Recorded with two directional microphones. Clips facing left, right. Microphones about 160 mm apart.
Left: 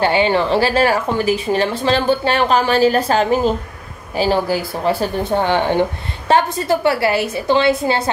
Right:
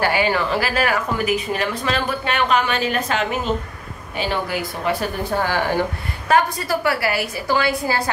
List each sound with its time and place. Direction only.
0.0 s speech: 25° left (ahead or behind)